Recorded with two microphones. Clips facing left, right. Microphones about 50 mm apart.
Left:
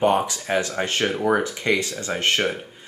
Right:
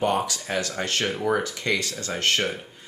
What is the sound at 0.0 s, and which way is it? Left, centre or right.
Speech, left.